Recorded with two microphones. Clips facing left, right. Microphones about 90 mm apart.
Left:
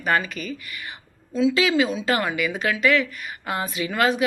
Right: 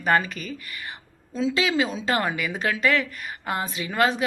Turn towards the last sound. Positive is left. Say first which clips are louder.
# left 1 dB
turn(degrees=-30)  # may be behind; listen again after turning